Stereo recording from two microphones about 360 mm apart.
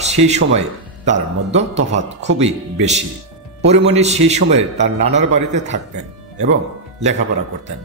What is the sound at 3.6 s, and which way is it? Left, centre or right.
Speech, centre.